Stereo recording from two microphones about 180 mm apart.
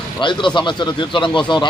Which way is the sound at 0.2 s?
25° left (ahead or behind).